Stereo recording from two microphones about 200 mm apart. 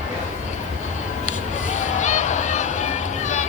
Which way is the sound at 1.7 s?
35° left (ahead or behind).